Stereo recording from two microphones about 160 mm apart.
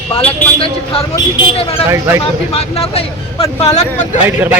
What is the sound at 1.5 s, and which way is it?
Speech, 35° left (ahead or behind).